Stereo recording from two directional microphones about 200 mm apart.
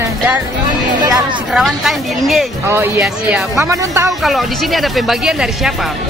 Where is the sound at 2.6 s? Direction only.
10° right (ahead or behind).